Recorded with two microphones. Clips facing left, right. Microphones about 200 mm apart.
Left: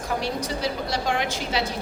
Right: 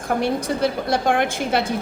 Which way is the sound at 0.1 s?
55° right (ahead or behind).